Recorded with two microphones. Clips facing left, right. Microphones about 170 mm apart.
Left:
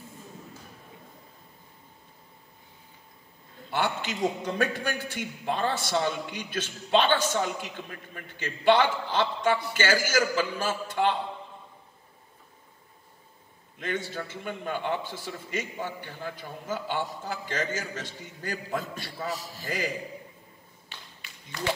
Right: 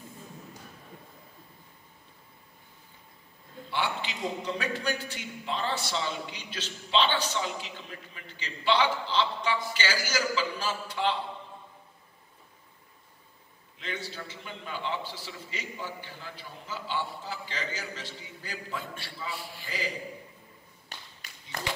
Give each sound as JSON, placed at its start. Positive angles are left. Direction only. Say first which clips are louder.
{"t": 3.7, "sound": "a man's voice", "louder": "left 3 dB", "side_deg": 45}
{"t": 13.7, "sound": "a man's voice", "louder": "left 6 dB", "side_deg": 50}
{"t": 20.9, "sound": "clapping", "louder": "right 1 dB", "side_deg": -40}